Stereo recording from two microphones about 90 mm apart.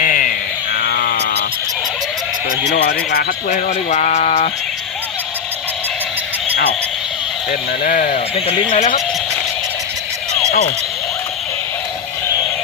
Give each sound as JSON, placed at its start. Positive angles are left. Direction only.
{"t": 8.4, "sound": "speech", "side_deg": 75}